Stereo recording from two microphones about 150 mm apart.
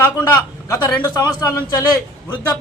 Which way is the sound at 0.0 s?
15° left (ahead or behind).